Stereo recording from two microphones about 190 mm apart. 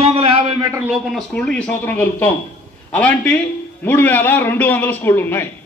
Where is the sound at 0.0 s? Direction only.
30° right (ahead or behind).